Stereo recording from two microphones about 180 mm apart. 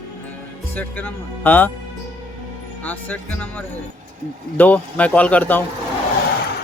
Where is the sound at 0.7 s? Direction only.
10° left (ahead or behind).